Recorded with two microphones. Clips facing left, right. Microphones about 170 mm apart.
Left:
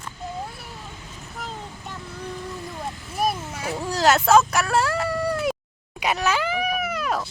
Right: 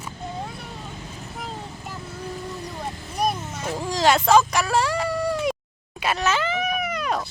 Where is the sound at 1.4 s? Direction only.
Centre (ahead or behind).